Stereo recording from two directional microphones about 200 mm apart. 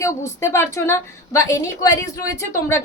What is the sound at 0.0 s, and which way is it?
A woman's voice, 15° left (ahead or behind).